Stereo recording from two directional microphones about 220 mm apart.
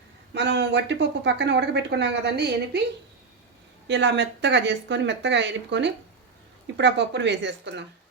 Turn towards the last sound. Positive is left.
turn(degrees=-50)  # may be behind; listen again after turning